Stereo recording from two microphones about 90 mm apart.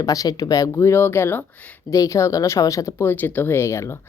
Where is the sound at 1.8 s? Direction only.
35° left (ahead or behind).